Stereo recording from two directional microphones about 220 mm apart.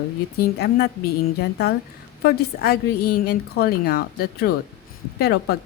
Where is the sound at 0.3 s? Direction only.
45° left (ahead or behind).